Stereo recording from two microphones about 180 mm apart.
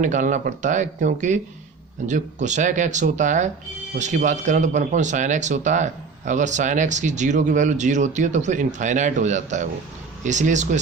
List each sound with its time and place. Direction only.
0.0 s speech: 45° right (ahead or behind)